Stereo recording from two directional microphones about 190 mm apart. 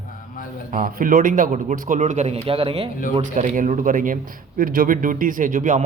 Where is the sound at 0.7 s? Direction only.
45° right (ahead or behind); by 2.9 s 30° right (ahead or behind).